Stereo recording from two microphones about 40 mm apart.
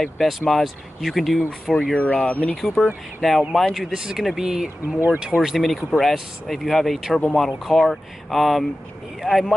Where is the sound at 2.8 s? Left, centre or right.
Centre.